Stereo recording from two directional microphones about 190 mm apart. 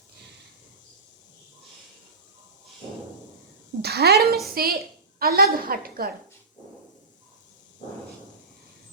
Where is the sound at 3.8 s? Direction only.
55° right (ahead or behind).